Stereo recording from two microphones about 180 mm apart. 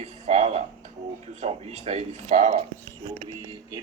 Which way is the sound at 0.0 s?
40° right (ahead or behind).